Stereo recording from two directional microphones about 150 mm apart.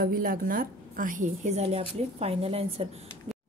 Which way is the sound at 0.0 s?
70° right (ahead or behind).